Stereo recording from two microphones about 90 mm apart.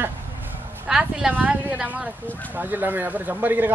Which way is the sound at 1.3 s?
20° right (ahead or behind).